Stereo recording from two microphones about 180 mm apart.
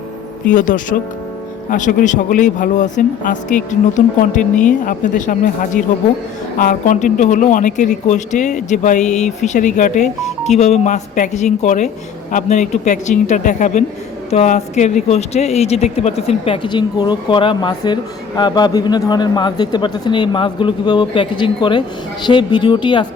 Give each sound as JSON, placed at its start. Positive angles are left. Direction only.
{"t": 0.5, "sound": "a man's voice", "side_deg": 45}